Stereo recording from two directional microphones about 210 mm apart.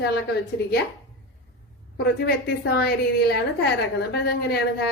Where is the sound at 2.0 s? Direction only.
50° left (ahead or behind).